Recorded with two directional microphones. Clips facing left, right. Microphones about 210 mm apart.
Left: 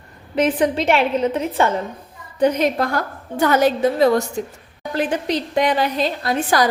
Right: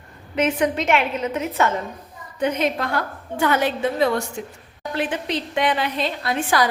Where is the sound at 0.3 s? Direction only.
35° left (ahead or behind).